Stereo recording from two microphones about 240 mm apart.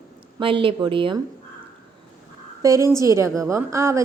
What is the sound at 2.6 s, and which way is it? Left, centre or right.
A woman's voice, centre.